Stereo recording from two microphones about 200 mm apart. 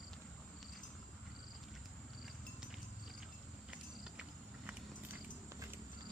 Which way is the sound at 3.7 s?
5° right (ahead or behind).